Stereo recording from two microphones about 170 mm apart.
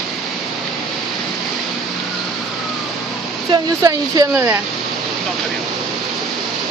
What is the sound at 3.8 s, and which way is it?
Speech, 20° right (ahead or behind).